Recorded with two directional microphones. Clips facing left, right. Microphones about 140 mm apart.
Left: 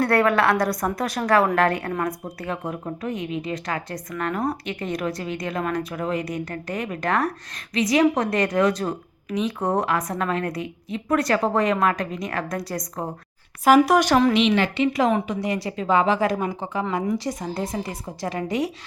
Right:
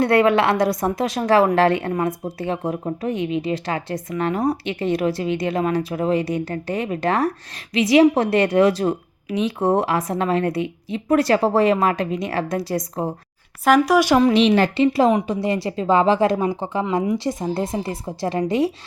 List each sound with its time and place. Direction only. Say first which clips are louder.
0.0 s a woman's voice: right 3 dB; 20° right (ahead or behind)
13.7 s speech: even; centre (ahead or behind)
14.0 s speech: right 3 dB; 10° right (ahead or behind)
14.3 s a woman's voice: right 4 dB; 40° right (ahead or behind)